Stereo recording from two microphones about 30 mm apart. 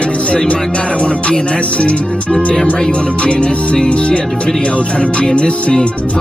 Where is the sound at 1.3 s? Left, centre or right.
Left.